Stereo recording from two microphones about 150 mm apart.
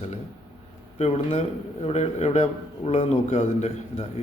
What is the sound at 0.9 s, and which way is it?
A man's voice, 45° left (ahead or behind).